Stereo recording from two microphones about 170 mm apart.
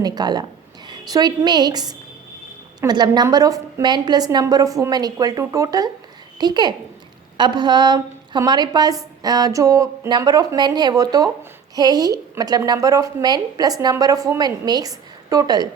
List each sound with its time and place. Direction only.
0.0 s a woman's voice: 25° right (ahead or behind)